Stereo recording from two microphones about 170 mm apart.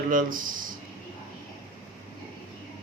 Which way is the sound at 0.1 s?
50° right (ahead or behind).